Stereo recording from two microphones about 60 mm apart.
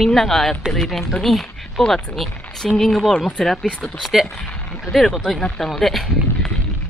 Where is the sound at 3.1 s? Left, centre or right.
Left.